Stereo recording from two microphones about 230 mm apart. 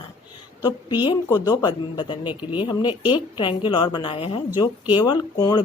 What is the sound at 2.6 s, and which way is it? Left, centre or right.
A woman's voice, left.